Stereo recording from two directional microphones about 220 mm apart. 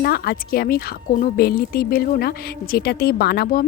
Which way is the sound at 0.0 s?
45° left (ahead or behind).